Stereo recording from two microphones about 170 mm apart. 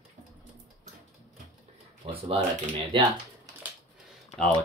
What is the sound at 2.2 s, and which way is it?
Speech, 30° right (ahead or behind).